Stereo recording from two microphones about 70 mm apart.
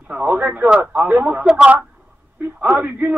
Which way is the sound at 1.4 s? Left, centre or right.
Centre.